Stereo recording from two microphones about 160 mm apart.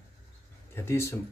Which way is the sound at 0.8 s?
15° left (ahead or behind).